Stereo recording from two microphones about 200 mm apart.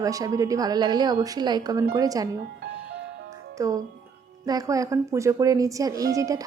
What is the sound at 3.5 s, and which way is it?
A child's voice, 15° right (ahead or behind).